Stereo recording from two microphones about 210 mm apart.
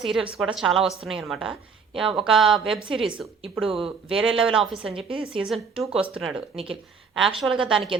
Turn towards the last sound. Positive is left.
turn(degrees=-5)  # may be behind; listen again after turning